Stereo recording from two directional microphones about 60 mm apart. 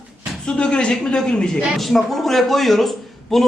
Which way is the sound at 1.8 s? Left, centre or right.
Centre.